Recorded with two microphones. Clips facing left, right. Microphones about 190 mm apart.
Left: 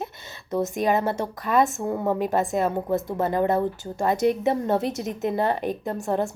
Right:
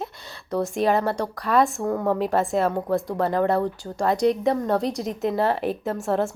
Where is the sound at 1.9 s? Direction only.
15° left (ahead or behind).